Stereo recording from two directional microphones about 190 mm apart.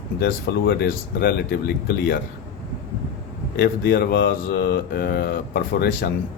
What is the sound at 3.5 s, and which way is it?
Speech, 55° left (ahead or behind).